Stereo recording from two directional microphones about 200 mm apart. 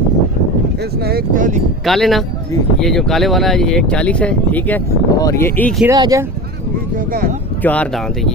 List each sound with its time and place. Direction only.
1.0 s speech: 45° right (ahead or behind)
1.9 s speech: centre (ahead or behind)
5.9 s speech: 15° right (ahead or behind)
7.6 s speech: 5° left (ahead or behind)